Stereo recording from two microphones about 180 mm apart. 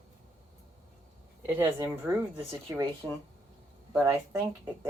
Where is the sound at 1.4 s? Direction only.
10° right (ahead or behind).